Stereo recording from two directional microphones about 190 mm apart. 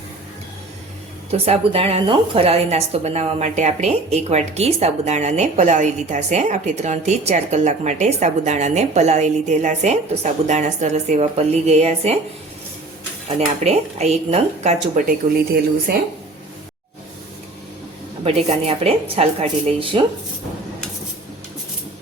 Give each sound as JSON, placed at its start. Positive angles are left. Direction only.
{"t": 1.3, "sound": "a woman's voice", "side_deg": -30}
{"t": 13.2, "sound": "a woman's voice", "side_deg": -35}
{"t": 18.3, "sound": "a woman's voice", "side_deg": -30}